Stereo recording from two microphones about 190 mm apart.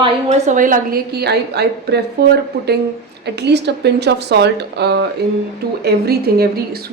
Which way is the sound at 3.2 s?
60° right (ahead or behind).